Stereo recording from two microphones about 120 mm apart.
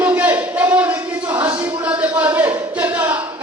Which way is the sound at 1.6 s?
10° right (ahead or behind).